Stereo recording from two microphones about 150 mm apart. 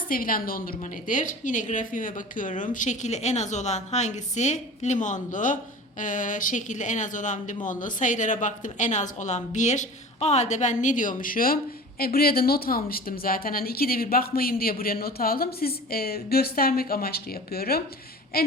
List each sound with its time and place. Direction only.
0.1 s a woman's voice: 70° left (ahead or behind); by 18.5 s 90° left